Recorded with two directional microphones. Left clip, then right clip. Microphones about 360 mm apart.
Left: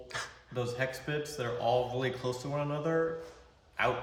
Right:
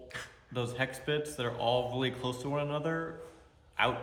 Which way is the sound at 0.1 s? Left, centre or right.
Centre.